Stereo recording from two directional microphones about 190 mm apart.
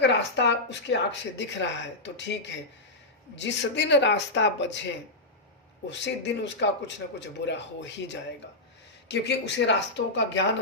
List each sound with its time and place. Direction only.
0.0 s speech: 65° left (ahead or behind)
5.9 s speech: 65° left (ahead or behind)